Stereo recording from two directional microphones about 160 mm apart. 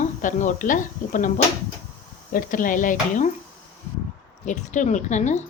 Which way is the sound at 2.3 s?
55° left (ahead or behind).